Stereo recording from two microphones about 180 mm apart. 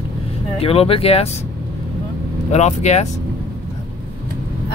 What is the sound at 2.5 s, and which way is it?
Speech, 40° left (ahead or behind).